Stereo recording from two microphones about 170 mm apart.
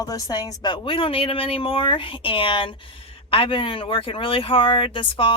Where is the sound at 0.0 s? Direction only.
20° left (ahead or behind).